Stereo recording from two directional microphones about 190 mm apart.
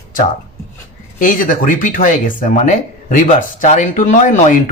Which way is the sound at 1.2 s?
45° left (ahead or behind).